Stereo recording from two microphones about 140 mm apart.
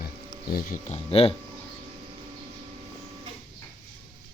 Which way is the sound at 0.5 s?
75° left (ahead or behind).